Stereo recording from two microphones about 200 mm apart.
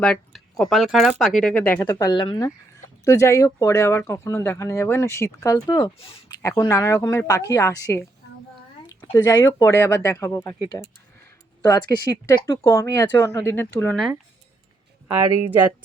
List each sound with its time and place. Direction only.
0.0 s speech: centre (ahead or behind); by 6.3 s 30° left (ahead or behind)
6.4 s speech: 15° left (ahead or behind)
9.1 s speech: 15° left (ahead or behind)
11.7 s speech: 15° left (ahead or behind)